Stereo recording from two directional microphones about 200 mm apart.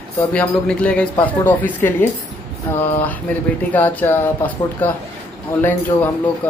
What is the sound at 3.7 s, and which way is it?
Speech, 10° left (ahead or behind).